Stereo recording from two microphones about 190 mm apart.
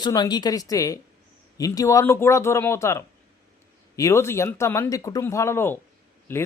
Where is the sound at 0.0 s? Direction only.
20° left (ahead or behind).